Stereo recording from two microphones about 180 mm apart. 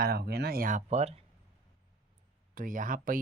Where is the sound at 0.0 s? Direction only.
60° right (ahead or behind); by 1.2 s 35° right (ahead or behind).